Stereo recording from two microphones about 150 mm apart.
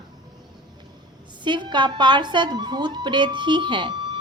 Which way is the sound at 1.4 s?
30° right (ahead or behind).